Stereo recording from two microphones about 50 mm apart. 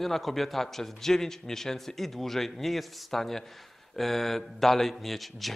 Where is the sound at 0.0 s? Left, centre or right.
Centre.